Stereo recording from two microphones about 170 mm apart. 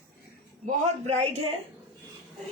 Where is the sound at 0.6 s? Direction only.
40° right (ahead or behind).